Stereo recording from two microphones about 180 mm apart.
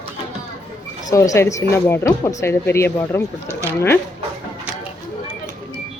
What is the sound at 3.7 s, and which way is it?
Speech, 15° left (ahead or behind).